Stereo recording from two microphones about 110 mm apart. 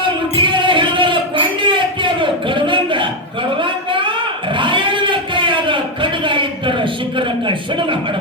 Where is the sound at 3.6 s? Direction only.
50° right (ahead or behind).